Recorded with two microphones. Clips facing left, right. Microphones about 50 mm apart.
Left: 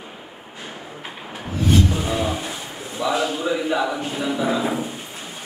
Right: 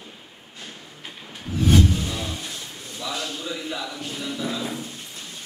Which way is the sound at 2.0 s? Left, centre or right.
Left.